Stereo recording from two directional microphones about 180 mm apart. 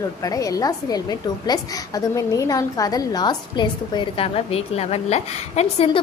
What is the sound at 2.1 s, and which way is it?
A woman's voice, 20° left (ahead or behind).